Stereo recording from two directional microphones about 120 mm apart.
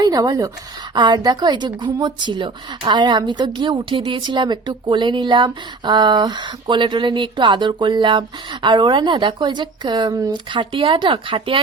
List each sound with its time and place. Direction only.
0.0 s a woman's voice: 35° right (ahead or behind)